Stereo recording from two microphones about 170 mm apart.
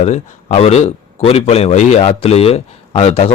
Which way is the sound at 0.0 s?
40° left (ahead or behind).